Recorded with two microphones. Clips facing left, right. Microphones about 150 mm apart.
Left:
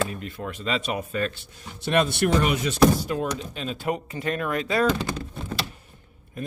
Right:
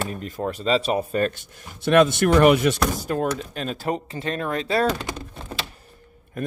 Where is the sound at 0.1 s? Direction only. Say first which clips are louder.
Right 5 dB; 40° right (ahead or behind).